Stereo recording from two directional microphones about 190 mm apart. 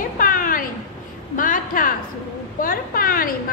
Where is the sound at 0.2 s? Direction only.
45° left (ahead or behind).